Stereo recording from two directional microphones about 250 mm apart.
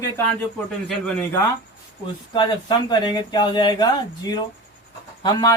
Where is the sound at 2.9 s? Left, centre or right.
Centre.